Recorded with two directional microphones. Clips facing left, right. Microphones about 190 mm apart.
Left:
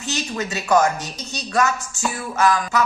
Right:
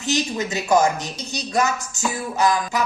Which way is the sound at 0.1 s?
15° right (ahead or behind).